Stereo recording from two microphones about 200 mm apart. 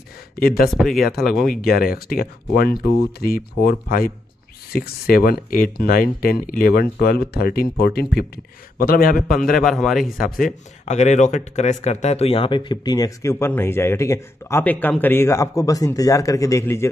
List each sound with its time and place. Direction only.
0.4 s speech: 50° left (ahead or behind)
0.7 s a man's voice: centre (ahead or behind)
1.6 s speech: 50° left (ahead or behind)
9.6 s a man's voice: centre (ahead or behind)
10.1 s speech: 45° left (ahead or behind); by 16.9 s 15° left (ahead or behind)